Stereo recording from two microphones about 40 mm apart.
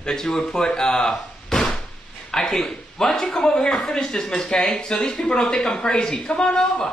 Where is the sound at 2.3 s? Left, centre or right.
Centre.